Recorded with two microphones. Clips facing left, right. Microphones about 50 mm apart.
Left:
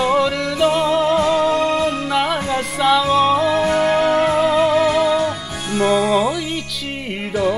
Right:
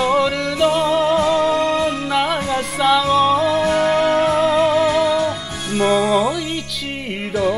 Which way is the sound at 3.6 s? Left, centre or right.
Centre.